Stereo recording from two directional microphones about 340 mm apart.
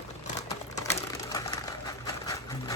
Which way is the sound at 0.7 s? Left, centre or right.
Centre.